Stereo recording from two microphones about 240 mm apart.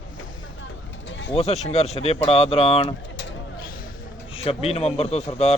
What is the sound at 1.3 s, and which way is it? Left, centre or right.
A man's voice, left.